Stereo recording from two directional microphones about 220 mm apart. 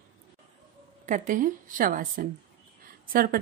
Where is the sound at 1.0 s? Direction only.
35° right (ahead or behind).